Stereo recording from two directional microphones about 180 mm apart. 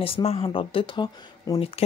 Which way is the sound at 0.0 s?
30° left (ahead or behind).